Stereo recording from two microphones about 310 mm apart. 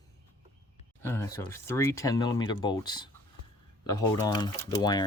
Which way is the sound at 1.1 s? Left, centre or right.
Centre.